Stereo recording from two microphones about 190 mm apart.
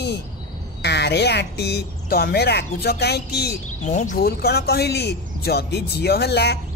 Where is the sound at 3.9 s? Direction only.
40° left (ahead or behind).